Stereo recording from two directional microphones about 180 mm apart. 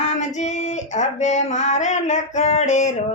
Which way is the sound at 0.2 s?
40° left (ahead or behind).